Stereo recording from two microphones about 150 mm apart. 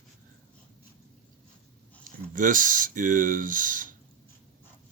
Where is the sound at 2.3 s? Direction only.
60° right (ahead or behind).